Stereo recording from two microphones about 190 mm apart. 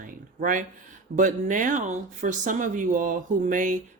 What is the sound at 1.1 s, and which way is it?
Speech, 40° right (ahead or behind).